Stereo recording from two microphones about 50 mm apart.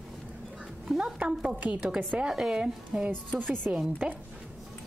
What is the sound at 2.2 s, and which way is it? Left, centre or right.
Speech, centre.